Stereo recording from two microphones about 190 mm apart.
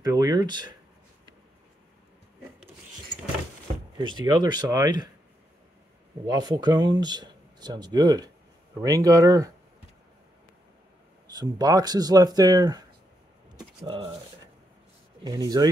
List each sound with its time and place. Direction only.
0.0 s a sound: 20° right (ahead or behind)
4.0 s speech: 25° right (ahead or behind)
6.2 s speech: 20° right (ahead or behind)
11.2 s speech: 20° right (ahead or behind)
13.6 s a sound: 25° right (ahead or behind)
15.2 s speech: 20° right (ahead or behind)